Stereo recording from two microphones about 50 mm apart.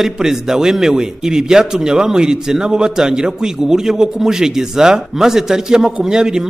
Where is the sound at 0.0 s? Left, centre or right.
Centre.